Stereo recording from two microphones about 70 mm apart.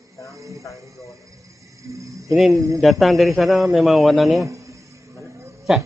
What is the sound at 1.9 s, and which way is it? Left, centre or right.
Speech, right.